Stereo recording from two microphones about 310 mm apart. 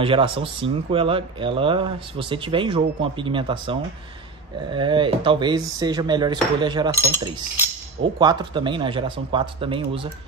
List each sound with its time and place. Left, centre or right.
0.0 s speech: centre
8.2 s speech: centre